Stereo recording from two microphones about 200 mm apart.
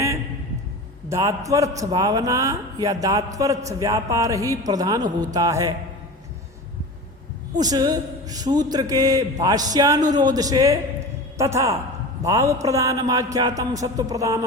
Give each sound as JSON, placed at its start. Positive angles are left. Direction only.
{"t": 1.1, "sound": "a man's voice", "side_deg": -15}
{"t": 7.6, "sound": "a man's voice", "side_deg": -20}